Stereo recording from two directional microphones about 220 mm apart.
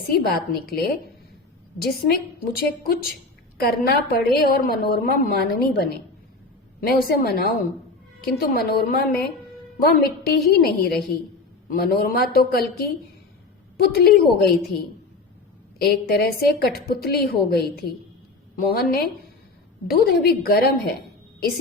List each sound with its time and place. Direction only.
0.1 s a woman's voice: 45° left (ahead or behind)
15.8 s a woman's voice: 45° left (ahead or behind)